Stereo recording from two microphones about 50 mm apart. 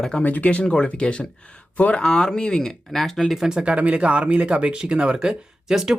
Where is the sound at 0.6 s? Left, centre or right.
Centre.